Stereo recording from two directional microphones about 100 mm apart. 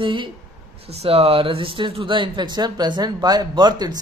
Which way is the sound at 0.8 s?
80° right.